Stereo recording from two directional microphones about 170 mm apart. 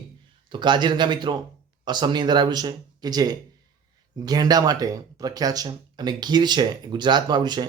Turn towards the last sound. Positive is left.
turn(degrees=-25)  # may be behind; listen again after turning